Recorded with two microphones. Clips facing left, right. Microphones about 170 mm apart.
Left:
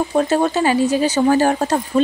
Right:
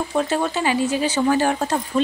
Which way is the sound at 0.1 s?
40° left (ahead or behind).